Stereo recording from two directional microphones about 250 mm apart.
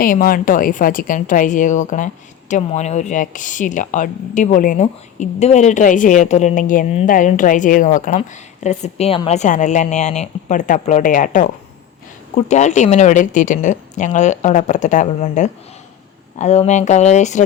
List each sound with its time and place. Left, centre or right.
0.0 s a woman's voice: left